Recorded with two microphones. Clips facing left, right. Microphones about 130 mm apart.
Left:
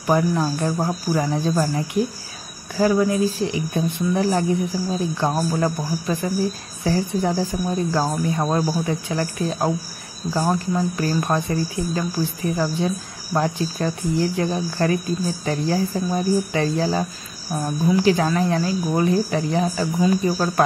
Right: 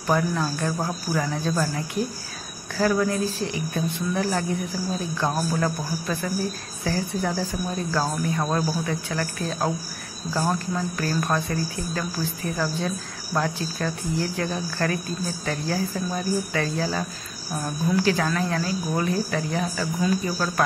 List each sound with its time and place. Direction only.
0.0 s speech: 15° left (ahead or behind)
3.1 s speech: 15° left (ahead or behind)